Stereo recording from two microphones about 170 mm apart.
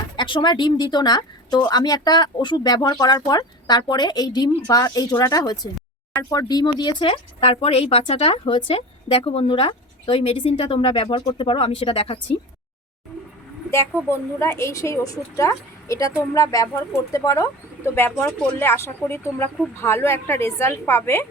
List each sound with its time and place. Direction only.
0.2 s speech: 25° left (ahead or behind)
14.1 s a woman's voice: 15° left (ahead or behind)